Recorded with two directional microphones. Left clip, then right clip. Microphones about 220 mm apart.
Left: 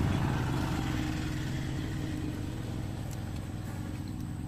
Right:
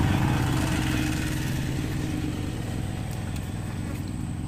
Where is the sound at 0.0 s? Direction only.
40° right (ahead or behind).